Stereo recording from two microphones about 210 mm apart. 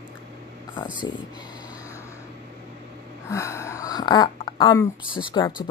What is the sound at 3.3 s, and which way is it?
Speech, 15° left (ahead or behind).